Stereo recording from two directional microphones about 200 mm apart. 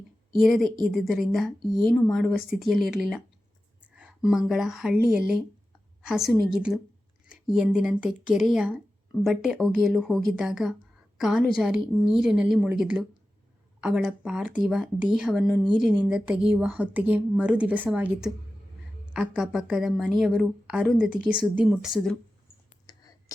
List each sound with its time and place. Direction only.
0.4 s a woman's voice: centre (ahead or behind)
22.9 s whispering: 20° left (ahead or behind)